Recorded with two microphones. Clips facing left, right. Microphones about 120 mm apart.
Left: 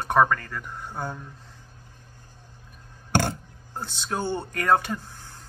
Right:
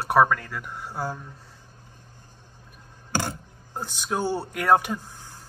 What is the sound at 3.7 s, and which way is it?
Speech, 15° right (ahead or behind).